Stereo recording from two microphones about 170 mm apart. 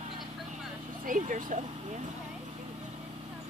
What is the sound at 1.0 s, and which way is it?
Speech, 50° right (ahead or behind).